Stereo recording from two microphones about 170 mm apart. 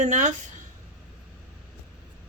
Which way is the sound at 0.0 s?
45° right (ahead or behind).